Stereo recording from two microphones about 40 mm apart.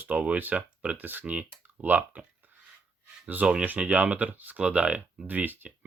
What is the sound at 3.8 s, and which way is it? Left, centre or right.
Speech, right.